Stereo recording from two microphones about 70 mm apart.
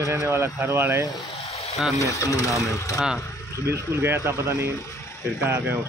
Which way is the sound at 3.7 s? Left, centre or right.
Right.